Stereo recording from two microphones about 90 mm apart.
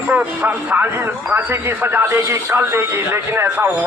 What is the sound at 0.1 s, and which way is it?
A man's voice, 15° right (ahead or behind).